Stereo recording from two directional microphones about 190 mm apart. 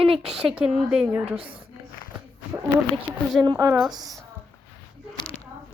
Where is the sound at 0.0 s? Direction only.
30° right (ahead or behind).